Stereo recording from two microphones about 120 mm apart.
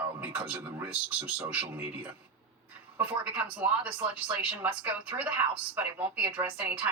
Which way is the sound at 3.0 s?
10° right (ahead or behind).